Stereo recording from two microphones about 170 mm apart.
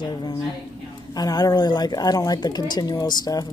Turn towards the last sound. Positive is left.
turn(degrees=25)  # may be behind; listen again after turning